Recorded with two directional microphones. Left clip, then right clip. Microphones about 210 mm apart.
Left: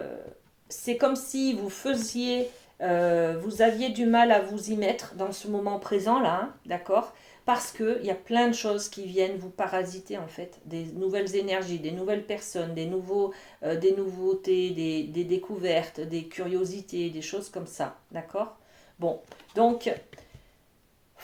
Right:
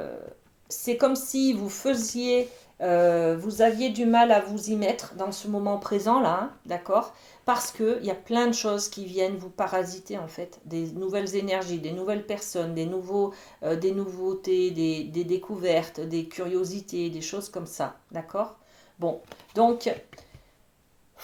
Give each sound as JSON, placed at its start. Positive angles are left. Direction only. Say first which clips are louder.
{"t": 0.7, "sound": "speech", "louder": "right 2 dB", "side_deg": -30}